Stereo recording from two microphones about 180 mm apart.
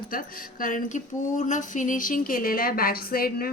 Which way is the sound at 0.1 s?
50° left (ahead or behind).